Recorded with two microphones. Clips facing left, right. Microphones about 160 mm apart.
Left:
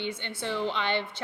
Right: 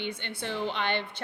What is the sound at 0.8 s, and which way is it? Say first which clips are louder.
Speech: left 1 dB; 55° right (ahead or behind).